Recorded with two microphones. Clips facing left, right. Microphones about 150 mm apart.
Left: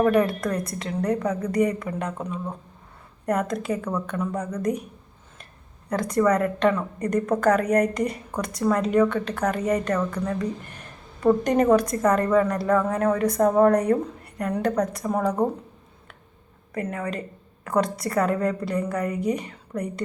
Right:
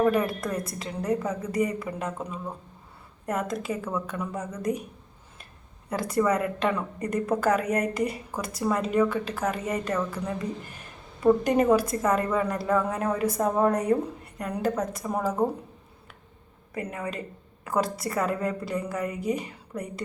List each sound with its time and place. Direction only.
0.0 s a woman's voice: 5° right (ahead or behind)
5.9 s a woman's voice: 5° right (ahead or behind)
16.9 s a woman's voice: 5° right (ahead or behind)